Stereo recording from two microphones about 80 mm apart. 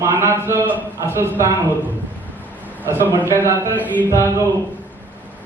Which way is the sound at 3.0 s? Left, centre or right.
Right.